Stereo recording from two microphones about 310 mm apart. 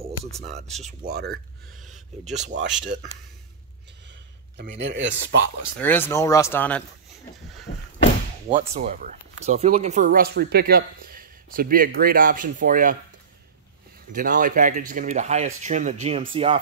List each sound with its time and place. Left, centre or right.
0.2 s speech: right
1.8 s a sound: centre
2.5 s speech: right
4.6 s speech: right
5.8 s speech: centre
7.7 s vehicle: left
8.5 s speech: right
10.0 s speech: right
14.1 s speech: right